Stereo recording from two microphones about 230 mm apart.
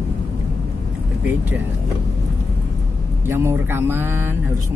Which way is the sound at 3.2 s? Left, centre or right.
Centre.